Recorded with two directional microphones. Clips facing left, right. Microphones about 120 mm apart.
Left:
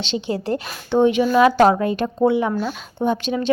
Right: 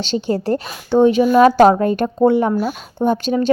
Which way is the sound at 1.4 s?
40° right (ahead or behind).